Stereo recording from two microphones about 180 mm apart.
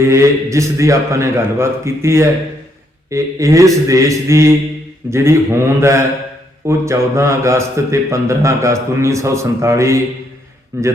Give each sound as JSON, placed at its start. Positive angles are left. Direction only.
{"t": 0.0, "sound": "a man's voice", "side_deg": -15}